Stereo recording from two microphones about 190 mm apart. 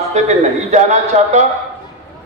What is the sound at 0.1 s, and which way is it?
Speech, 35° right (ahead or behind).